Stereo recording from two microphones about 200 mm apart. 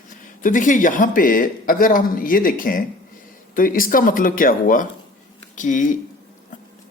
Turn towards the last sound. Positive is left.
turn(degrees=40)  # may be behind; listen again after turning